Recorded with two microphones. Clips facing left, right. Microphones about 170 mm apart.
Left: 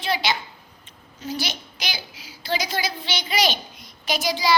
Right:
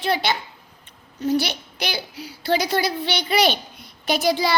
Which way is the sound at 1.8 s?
60° right (ahead or behind).